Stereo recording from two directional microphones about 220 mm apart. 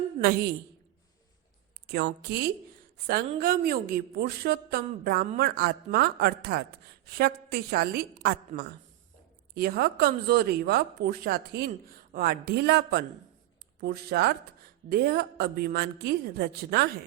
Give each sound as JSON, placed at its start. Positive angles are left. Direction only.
{"t": 0.2, "sound": "a woman's voice", "side_deg": -45}
{"t": 1.9, "sound": "a woman's voice", "side_deg": -45}